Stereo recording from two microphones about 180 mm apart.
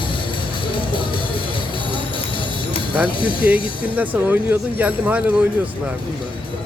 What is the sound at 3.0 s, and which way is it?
Speech, 30° left (ahead or behind).